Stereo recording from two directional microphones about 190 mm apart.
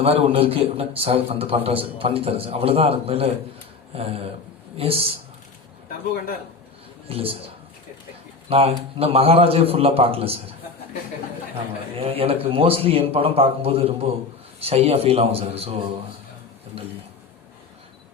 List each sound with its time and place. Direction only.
0.0 s a man's voice: 30° right (ahead or behind)
7.1 s a man's voice: 30° right (ahead or behind)
8.4 s a man's voice: 30° right (ahead or behind)
11.9 s a man's voice: 30° right (ahead or behind)
16.7 s a man's voice: 30° right (ahead or behind)